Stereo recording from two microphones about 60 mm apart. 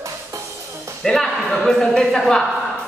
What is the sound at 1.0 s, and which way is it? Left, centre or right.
Music, centre.